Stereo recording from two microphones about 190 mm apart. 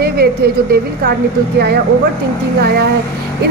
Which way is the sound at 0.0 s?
55° right (ahead or behind).